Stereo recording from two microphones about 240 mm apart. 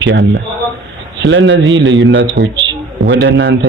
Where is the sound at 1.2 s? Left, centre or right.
Right.